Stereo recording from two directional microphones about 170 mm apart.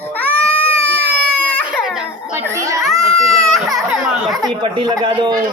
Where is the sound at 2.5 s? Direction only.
15° right (ahead or behind).